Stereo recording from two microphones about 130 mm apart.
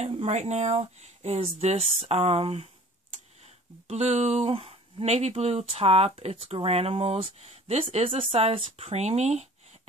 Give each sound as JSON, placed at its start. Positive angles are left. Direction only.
{"t": 0.0, "sound": "speech", "side_deg": -50}